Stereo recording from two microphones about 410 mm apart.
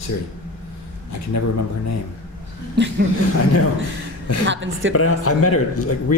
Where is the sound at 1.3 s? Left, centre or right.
Left.